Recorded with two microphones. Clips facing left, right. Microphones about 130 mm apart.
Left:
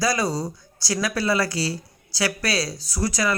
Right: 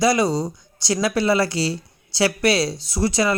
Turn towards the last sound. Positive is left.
turn(degrees=-25)  # may be behind; listen again after turning